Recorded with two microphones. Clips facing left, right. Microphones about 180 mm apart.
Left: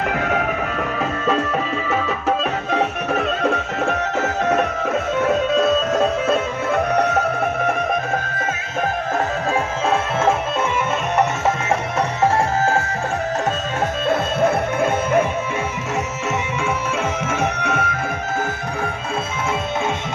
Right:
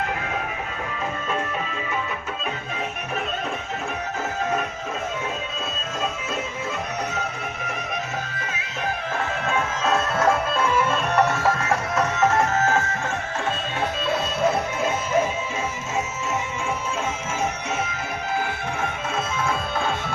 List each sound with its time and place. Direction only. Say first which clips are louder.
1.9 s music: left 9 dB; 85° left; by 7.2 s 60° left (ahead or behind)
7.7 s music: left 9 dB; 50° left (ahead or behind)
11.9 s music: left 2 dB; 30° left (ahead or behind)
14.1 s music: left 4 dB; 55° left (ahead or behind)
17.6 s music: left 5 dB; 60° left (ahead or behind)